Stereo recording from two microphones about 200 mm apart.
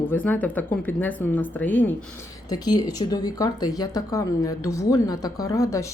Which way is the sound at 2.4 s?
20° left (ahead or behind).